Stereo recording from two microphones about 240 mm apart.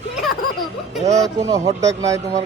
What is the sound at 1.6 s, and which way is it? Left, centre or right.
Speech, centre.